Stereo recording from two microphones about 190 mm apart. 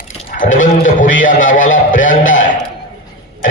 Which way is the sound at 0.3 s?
45° left (ahead or behind).